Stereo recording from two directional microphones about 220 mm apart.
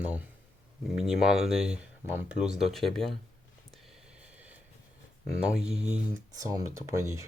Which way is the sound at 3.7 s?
5° right (ahead or behind).